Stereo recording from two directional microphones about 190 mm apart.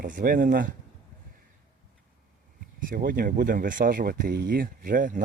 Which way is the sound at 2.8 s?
45° right (ahead or behind).